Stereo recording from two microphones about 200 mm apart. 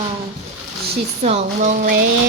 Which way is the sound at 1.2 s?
35° right (ahead or behind).